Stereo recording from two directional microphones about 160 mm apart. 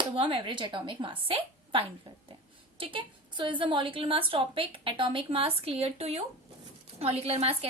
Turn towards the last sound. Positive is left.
turn(degrees=-40)  # may be behind; listen again after turning